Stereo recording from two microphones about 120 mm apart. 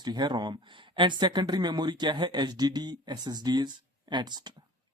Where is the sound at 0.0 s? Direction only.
35° right (ahead or behind).